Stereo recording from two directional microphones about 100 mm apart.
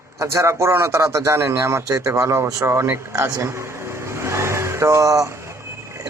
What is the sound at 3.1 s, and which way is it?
Vehicle, 35° right (ahead or behind).